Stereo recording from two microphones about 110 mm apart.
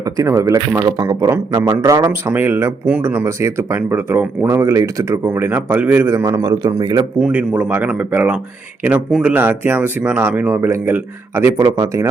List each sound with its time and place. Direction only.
0.0 s speech: 30° right (ahead or behind)
2.3 s speech: 20° right (ahead or behind)
7.2 s speech: 10° right (ahead or behind)
9.0 s speech: 5° right (ahead or behind)
9.3 s speech: 20° right (ahead or behind)